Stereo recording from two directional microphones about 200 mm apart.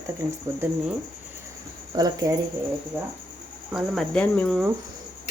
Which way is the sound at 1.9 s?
20° right (ahead or behind).